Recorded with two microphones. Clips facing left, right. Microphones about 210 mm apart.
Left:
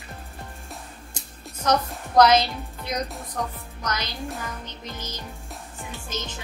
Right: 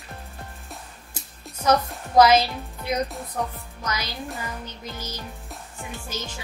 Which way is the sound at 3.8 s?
10° right (ahead or behind).